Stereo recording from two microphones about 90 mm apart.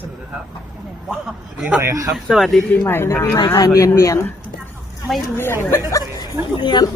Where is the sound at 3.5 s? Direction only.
35° left (ahead or behind).